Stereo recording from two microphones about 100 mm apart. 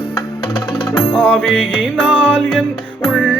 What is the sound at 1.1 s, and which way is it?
Music, 10° left (ahead or behind).